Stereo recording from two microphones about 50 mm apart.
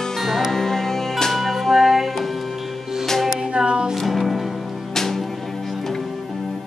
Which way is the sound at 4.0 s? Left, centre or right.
Centre.